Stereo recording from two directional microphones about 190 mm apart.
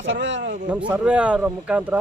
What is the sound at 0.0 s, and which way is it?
Speech, 75° right (ahead or behind).